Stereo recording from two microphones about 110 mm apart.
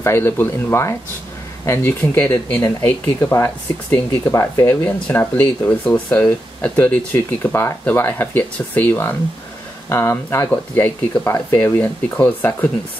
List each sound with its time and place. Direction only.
0.0 s speech: 25° left (ahead or behind)